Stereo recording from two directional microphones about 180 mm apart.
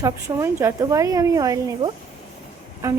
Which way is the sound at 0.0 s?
15° right (ahead or behind).